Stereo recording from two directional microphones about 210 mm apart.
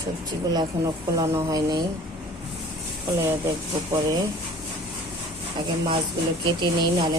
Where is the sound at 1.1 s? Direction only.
15° right (ahead or behind).